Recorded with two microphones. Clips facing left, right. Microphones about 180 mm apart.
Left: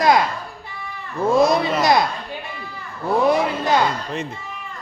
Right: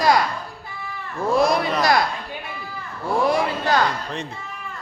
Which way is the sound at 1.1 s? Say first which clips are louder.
Left 3 dB; 20° left (ahead or behind).